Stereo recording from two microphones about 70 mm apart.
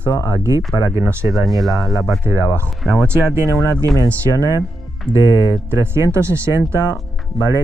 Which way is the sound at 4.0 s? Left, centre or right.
Right.